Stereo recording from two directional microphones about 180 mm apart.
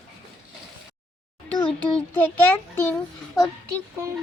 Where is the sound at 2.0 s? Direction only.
10° left (ahead or behind).